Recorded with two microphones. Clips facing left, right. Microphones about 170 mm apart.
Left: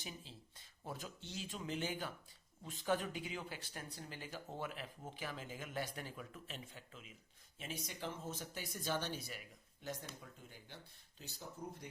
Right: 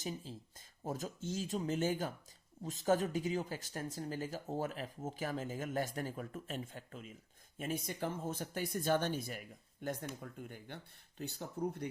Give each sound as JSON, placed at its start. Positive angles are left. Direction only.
{"t": 0.0, "sound": "speech", "side_deg": -45}